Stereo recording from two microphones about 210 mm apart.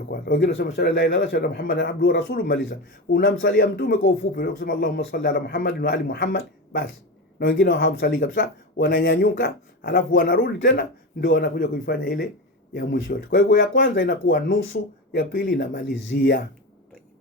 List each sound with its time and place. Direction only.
0.1 s speech: 50° left (ahead or behind)
3.2 s speech: 60° left (ahead or behind)
7.3 s speech: 60° left (ahead or behind)
11.2 s speech: 55° left (ahead or behind)